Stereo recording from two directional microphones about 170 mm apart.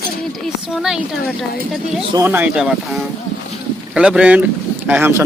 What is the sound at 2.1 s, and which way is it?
A man's voice, 10° right (ahead or behind).